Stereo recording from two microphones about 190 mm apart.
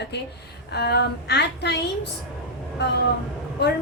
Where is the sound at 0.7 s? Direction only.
60° left (ahead or behind).